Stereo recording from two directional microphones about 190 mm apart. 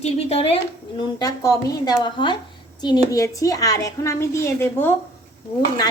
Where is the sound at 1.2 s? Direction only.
20° left (ahead or behind).